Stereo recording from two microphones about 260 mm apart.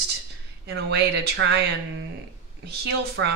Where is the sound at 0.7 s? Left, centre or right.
Right.